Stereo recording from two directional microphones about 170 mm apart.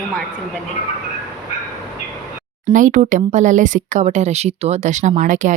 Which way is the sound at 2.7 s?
50° right (ahead or behind).